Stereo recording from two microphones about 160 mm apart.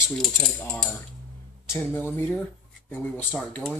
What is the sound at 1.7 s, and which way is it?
Speech, 15° left (ahead or behind).